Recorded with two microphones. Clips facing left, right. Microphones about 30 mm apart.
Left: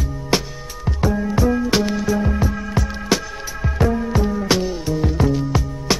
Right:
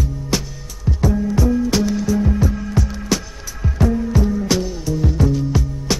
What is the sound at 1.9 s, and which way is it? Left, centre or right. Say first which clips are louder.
Music: right 1 dB; left.